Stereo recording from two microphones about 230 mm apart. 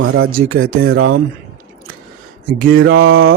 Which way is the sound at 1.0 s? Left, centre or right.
Right.